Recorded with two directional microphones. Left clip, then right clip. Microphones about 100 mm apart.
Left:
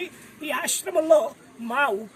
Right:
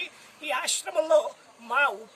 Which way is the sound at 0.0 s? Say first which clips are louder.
Left 2 dB; 30° left (ahead or behind).